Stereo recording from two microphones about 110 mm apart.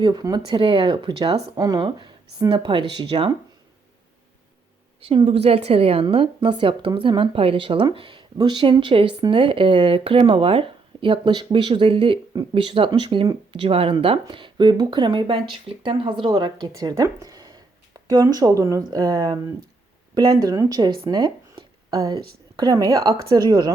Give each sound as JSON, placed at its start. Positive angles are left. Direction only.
{"t": 0.0, "sound": "speech", "side_deg": -40}
{"t": 5.0, "sound": "a woman's voice", "side_deg": -55}
{"t": 5.4, "sound": "a woman's voice", "side_deg": -70}
{"t": 20.4, "sound": "a woman's voice", "side_deg": -35}